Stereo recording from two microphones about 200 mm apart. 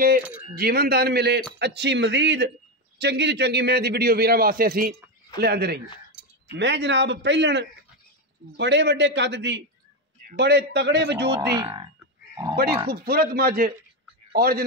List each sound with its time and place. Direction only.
0.6 s a man's voice: 50° right (ahead or behind)
11.5 s speech: 20° right (ahead or behind)
12.9 s a man's voice: 50° right (ahead or behind)